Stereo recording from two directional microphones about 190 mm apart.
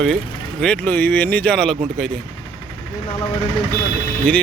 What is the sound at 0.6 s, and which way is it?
Speech, 5° left (ahead or behind).